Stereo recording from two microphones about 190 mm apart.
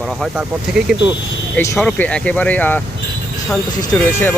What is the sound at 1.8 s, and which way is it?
Speech, 5° left (ahead or behind).